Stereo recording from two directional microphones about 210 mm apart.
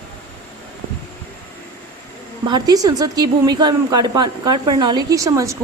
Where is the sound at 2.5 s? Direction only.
20° right (ahead or behind).